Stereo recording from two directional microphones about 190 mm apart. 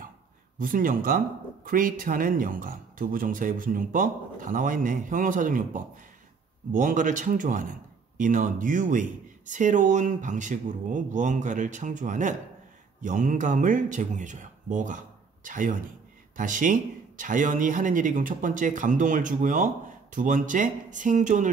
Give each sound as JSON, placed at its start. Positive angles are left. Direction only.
{"t": 0.6, "sound": "speech", "side_deg": -45}